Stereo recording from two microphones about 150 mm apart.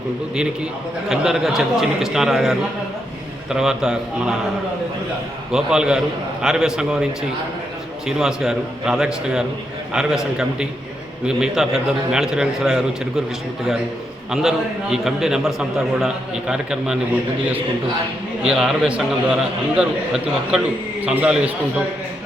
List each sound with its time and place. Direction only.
0.3 s a man's voice: 5° right (ahead or behind)
5.5 s a man's voice: 5° right (ahead or behind)
14.3 s a man's voice: 5° right (ahead or behind)
18.4 s a man's voice: 5° right (ahead or behind)